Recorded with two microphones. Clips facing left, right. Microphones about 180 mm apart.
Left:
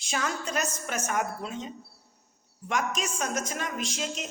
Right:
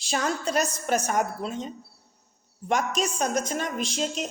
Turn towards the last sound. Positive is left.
turn(degrees=-35)  # may be behind; listen again after turning